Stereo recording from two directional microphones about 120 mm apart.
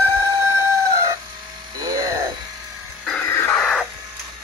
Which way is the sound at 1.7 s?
30° right (ahead or behind).